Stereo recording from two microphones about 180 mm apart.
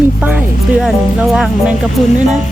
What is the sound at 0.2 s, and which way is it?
Speech, 5° right (ahead or behind).